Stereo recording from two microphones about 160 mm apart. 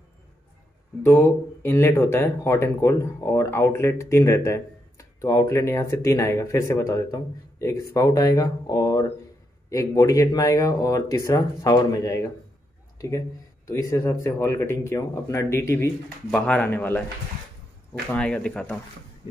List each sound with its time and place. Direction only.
1.0 s speech: 15° left (ahead or behind)
13.7 s speech: 20° left (ahead or behind)
16.3 s speech: 5° left (ahead or behind)
18.1 s speech: 5° left (ahead or behind)